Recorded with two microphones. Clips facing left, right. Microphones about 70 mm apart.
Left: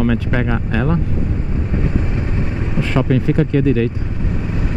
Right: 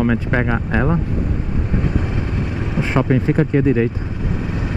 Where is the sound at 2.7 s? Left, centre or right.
Right.